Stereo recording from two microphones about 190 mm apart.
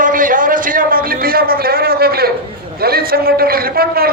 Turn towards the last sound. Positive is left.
turn(degrees=-55)  # may be behind; listen again after turning